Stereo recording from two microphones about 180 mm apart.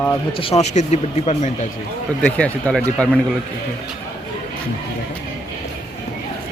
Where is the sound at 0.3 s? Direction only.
35° left (ahead or behind).